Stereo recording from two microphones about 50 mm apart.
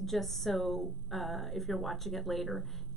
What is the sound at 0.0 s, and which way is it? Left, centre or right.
A woman's voice, centre.